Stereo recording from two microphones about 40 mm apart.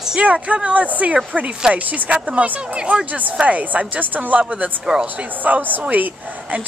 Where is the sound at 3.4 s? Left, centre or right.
Right.